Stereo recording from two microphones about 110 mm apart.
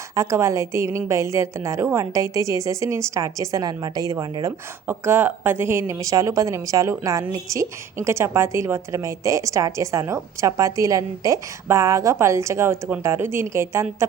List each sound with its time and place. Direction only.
0.1 s a woman's voice: 30° right (ahead or behind)
4.9 s a woman's voice: 20° right (ahead or behind)